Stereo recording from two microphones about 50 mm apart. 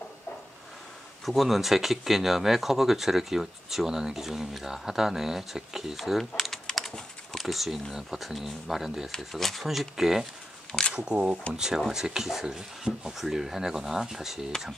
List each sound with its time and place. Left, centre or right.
1.2 s speech: centre
10.7 s speech: centre
11.5 s speech: centre